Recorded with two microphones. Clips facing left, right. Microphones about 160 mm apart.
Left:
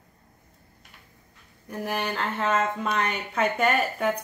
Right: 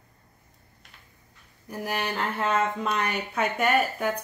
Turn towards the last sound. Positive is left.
turn(degrees=0)  # may be behind; listen again after turning